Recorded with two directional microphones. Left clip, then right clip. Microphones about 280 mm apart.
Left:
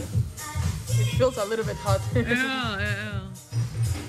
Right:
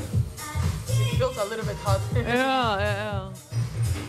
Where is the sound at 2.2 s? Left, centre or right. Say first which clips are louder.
Right 6 dB; centre.